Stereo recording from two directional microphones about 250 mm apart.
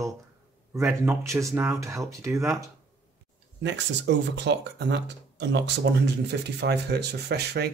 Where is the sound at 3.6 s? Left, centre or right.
Right.